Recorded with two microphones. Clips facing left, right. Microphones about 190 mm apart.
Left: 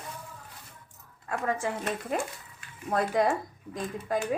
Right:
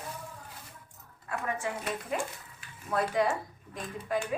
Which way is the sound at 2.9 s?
40° left (ahead or behind).